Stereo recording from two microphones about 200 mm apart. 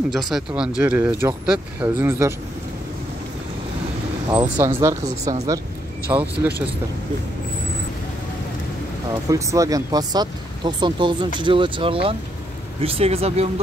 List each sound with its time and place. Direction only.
0.6 s speech: 5° right (ahead or behind)
4.3 s speech: 15° right (ahead or behind)
9.3 s speech: 15° right (ahead or behind)